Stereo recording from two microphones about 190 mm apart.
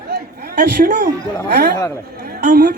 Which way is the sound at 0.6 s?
55° right (ahead or behind).